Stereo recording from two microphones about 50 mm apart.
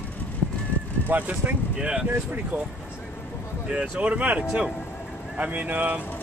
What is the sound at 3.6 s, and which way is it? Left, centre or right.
Speech, right.